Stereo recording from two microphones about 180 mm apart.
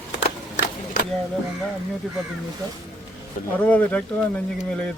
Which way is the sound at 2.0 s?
Centre (ahead or behind).